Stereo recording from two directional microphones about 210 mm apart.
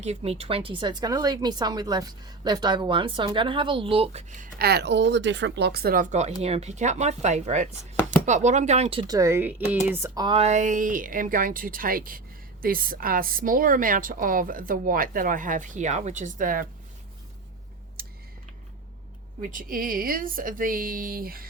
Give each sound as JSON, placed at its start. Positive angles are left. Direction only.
{"t": 0.0, "sound": "a woman's voice", "side_deg": -30}
{"t": 18.0, "sound": "a sound", "side_deg": -45}
{"t": 19.4, "sound": "a woman's voice", "side_deg": -40}